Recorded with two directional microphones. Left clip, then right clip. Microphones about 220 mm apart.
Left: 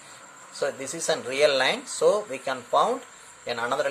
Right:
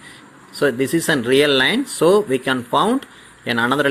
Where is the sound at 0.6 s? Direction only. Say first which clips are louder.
Right 11 dB; 30° right (ahead or behind).